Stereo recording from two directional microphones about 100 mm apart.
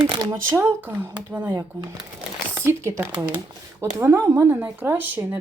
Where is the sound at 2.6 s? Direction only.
25° right (ahead or behind).